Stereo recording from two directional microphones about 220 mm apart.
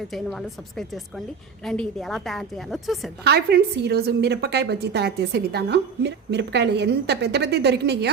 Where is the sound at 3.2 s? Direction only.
45° right (ahead or behind).